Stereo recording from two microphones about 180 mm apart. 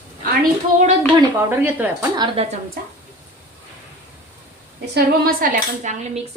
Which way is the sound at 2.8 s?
55° right (ahead or behind).